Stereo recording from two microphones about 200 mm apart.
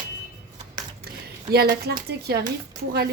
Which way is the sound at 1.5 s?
55° right (ahead or behind).